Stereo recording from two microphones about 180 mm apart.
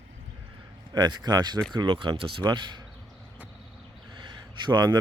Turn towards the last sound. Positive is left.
turn(degrees=-25)  # may be behind; listen again after turning